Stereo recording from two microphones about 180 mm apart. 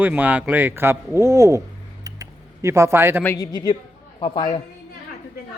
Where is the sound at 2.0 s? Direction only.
20° right (ahead or behind).